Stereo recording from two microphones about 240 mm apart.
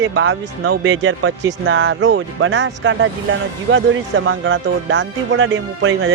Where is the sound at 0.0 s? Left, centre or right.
Right.